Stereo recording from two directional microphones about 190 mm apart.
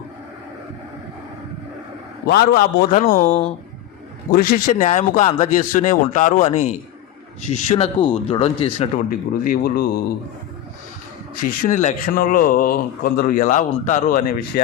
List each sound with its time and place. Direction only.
2.2 s speech: 55° left (ahead or behind)
4.3 s speech: 50° left (ahead or behind); by 8.9 s 30° left (ahead or behind)
9.0 s speech: 50° left (ahead or behind)
11.4 s speech: 45° left (ahead or behind)